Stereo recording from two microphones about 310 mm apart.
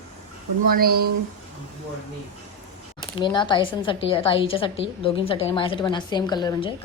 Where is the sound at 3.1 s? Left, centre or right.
Centre.